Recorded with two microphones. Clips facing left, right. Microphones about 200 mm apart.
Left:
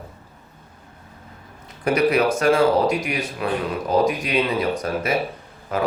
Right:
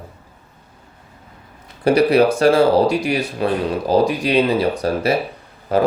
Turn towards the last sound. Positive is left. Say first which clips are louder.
# right 7 dB
turn(degrees=-35)  # may be behind; listen again after turning